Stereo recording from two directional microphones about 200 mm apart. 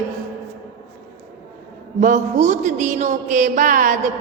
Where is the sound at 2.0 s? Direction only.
35° right (ahead or behind).